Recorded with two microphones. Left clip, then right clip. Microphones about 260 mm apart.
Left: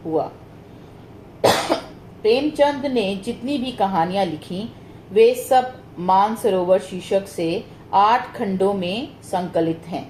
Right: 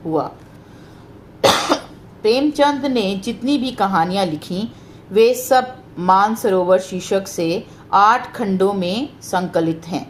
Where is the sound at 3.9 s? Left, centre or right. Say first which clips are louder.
Right 3 dB; right.